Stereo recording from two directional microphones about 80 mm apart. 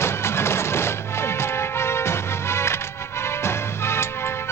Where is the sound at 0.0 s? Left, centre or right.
Left.